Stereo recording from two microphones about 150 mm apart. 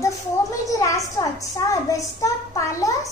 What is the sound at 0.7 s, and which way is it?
A woman's voice, 20° left (ahead or behind).